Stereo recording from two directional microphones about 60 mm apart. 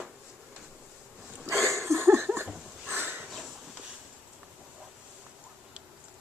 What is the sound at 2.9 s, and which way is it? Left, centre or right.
Sniff, right.